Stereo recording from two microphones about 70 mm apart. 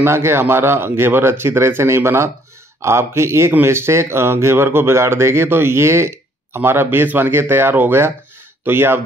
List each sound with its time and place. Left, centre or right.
0.0 s speech: right